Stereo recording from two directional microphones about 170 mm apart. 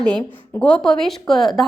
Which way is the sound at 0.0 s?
5° left (ahead or behind).